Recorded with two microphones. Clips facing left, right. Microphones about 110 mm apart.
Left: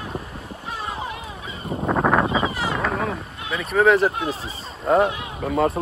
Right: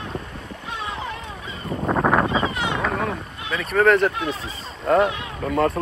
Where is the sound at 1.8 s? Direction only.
Centre (ahead or behind).